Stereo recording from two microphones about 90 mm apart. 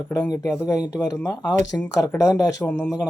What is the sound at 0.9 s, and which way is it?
Speech, 15° left (ahead or behind).